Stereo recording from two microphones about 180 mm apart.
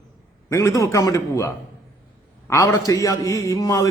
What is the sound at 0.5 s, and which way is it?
A man's voice, 15° left (ahead or behind).